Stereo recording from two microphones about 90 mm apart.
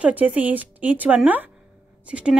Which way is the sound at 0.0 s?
15° right (ahead or behind).